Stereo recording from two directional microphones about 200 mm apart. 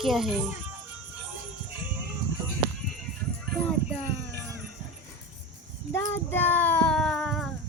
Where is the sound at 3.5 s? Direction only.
Centre (ahead or behind).